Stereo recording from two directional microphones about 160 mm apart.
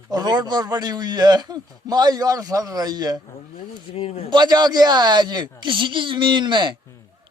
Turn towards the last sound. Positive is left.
turn(degrees=-30)  # may be behind; listen again after turning